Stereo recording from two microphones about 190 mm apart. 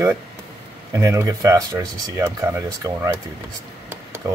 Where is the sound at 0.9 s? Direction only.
15° right (ahead or behind).